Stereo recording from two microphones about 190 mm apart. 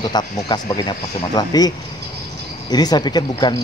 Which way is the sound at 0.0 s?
20° left (ahead or behind).